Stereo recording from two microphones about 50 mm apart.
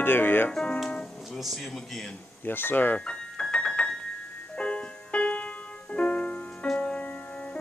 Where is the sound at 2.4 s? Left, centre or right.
Left.